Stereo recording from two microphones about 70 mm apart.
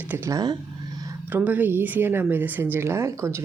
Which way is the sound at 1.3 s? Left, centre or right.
Right.